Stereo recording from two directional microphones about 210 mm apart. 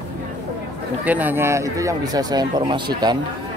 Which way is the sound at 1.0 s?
10° right (ahead or behind).